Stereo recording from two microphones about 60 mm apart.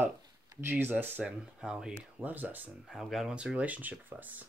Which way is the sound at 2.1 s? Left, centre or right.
Right.